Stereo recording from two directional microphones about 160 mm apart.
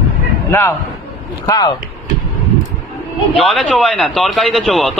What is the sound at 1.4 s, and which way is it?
Speech, 25° left (ahead or behind).